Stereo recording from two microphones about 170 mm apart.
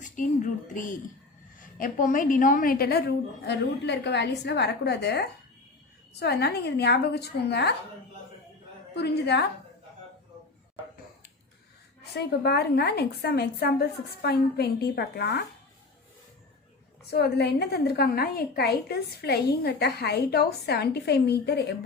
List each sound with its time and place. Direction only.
0.0 s a woman's voice: 50° left (ahead or behind); by 3.0 s 65° left (ahead or behind)
3.4 s a woman's voice: 85° left
9.0 s a woman's voice: 80° left
12.1 s a woman's voice: 75° left (ahead or behind)
17.1 s a woman's voice: 70° left (ahead or behind)